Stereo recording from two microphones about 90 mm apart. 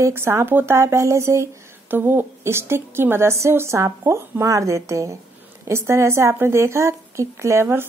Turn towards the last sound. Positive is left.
turn(degrees=-25)  # may be behind; listen again after turning